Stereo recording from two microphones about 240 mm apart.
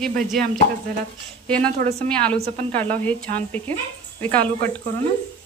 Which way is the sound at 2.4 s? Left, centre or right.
Right.